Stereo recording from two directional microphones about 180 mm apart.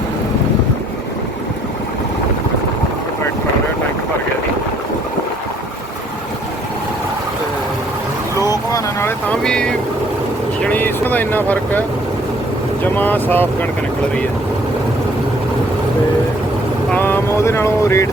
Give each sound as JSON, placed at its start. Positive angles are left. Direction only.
{"t": 8.4, "sound": "vehicle", "side_deg": 20}
{"t": 12.8, "sound": "speech", "side_deg": 10}
{"t": 16.9, "sound": "boat", "side_deg": 10}